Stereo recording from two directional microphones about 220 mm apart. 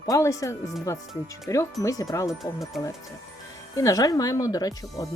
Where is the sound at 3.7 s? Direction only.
15° left (ahead or behind).